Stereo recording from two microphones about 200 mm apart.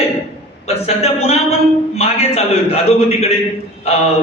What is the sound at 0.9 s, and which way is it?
A man's voice, 30° left (ahead or behind).